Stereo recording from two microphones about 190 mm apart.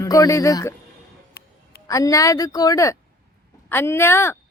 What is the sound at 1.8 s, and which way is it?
A woman's voice, 15° left (ahead or behind).